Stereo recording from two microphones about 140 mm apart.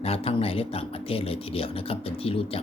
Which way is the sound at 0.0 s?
45° left (ahead or behind).